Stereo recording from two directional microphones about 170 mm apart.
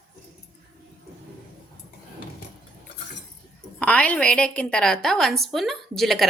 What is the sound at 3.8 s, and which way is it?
A woman's voice, 10° left (ahead or behind).